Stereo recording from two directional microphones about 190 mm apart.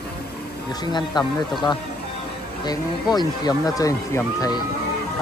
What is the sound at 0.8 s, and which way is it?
Speech, 20° left (ahead or behind).